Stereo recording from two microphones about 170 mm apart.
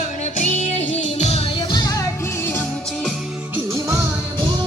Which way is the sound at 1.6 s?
25° left (ahead or behind).